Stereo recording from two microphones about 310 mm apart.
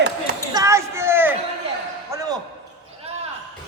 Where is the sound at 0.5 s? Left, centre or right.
Centre.